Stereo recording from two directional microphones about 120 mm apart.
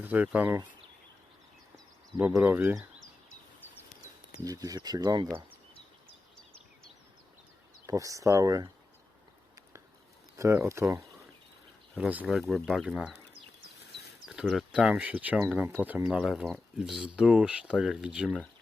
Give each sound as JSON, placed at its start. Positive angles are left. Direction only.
{"t": 0.0, "sound": "speech", "side_deg": -15}
{"t": 2.4, "sound": "speech", "side_deg": -15}
{"t": 4.4, "sound": "speech", "side_deg": -30}
{"t": 7.9, "sound": "speech", "side_deg": -25}
{"t": 10.3, "sound": "speech", "side_deg": -25}
{"t": 11.9, "sound": "speech", "side_deg": -10}
{"t": 12.3, "sound": "speech", "side_deg": 0}
{"t": 14.3, "sound": "speech", "side_deg": -5}